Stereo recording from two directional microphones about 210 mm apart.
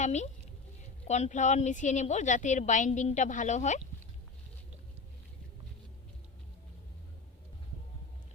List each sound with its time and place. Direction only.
0.0 s a woman's voice: 35° left (ahead or behind)